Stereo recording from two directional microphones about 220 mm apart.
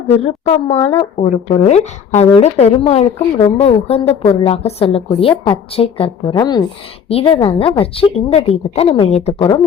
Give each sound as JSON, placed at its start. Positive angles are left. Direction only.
{"t": 0.2, "sound": "a woman's voice", "side_deg": 25}